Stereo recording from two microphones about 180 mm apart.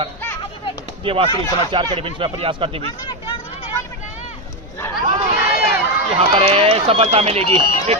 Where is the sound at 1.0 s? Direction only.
30° right (ahead or behind).